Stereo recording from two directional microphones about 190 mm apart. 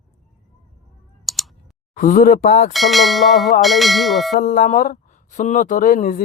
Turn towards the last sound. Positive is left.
turn(degrees=45)  # may be behind; listen again after turning